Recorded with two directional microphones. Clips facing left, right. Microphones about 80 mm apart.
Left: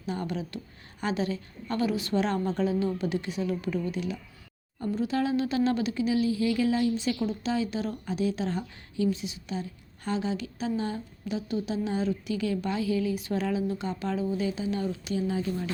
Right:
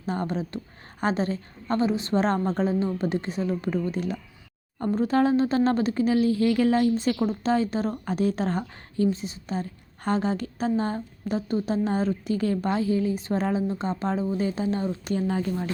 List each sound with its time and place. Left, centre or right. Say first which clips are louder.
0.0 s a woman's voice: right 4 dB; right
15.1 s speech: right 3 dB; right